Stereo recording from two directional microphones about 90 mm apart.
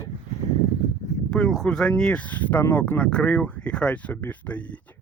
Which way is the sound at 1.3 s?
5° left (ahead or behind).